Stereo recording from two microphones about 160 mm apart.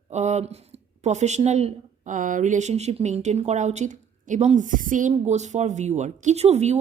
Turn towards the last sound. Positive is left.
turn(degrees=-45)  # may be behind; listen again after turning